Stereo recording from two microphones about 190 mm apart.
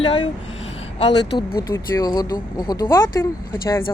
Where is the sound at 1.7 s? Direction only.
20° left (ahead or behind).